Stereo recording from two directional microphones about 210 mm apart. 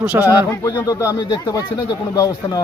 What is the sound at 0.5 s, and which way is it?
Speech, 10° left (ahead or behind).